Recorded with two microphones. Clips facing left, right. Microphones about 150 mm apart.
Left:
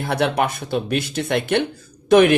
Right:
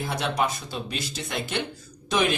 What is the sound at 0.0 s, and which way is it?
Speech, 60° left (ahead or behind).